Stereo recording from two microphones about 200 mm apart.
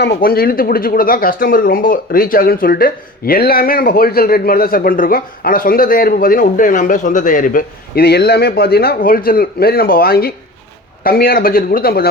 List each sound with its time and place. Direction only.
0.0 s speech: 50° left (ahead or behind)